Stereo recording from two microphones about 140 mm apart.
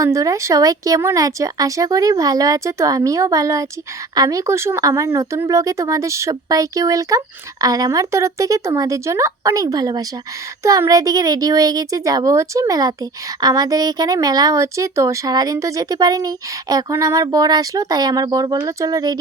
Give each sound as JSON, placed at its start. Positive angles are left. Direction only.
{"t": 0.0, "sound": "speech", "side_deg": -25}